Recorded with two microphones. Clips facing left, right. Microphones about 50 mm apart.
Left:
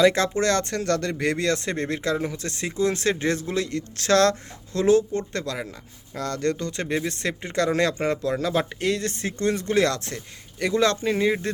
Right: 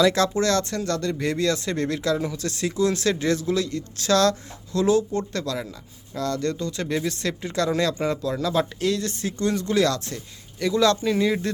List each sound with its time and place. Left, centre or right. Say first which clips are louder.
0.0 s a man's voice: even; left
6.8 s a man's voice: even; left